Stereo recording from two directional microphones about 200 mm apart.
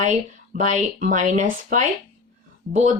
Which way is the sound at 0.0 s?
40° right (ahead or behind).